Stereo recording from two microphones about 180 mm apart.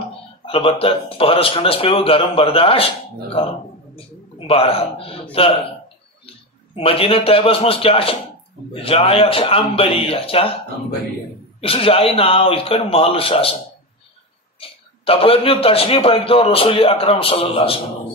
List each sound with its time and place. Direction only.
0.5 s a man's voice: 30° left (ahead or behind)
4.5 s a man's voice: 30° left (ahead or behind)
6.7 s a man's voice: 30° left (ahead or behind)
11.6 s a man's voice: 30° left (ahead or behind)
14.6 s a man's voice: 30° left (ahead or behind)